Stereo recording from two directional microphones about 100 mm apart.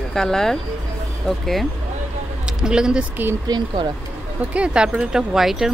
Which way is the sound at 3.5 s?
45° right (ahead or behind).